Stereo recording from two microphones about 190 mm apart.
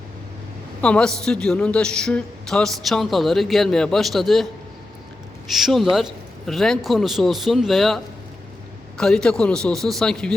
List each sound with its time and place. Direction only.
0.8 s a woman's voice: 5° left (ahead or behind)
5.5 s a woman's voice: centre (ahead or behind)